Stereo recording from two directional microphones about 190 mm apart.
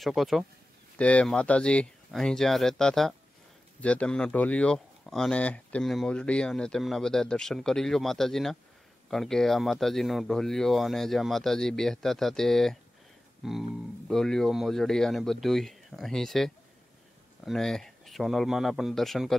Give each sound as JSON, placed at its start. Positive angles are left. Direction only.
{"t": 0.0, "sound": "speech", "side_deg": 0}